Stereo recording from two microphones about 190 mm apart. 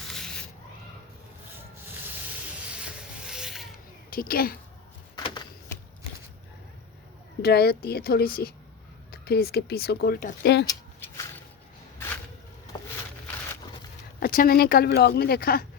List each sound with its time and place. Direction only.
0.0 s a sound: centre (ahead or behind)
2.7 s rub: 5° right (ahead or behind)
4.1 s speech: 50° left (ahead or behind)
5.1 s typewriter: 20° left (ahead or behind)
7.4 s speech: 55° left (ahead or behind)
10.7 s a sound: 15° left (ahead or behind)
14.2 s speech: 50° left (ahead or behind)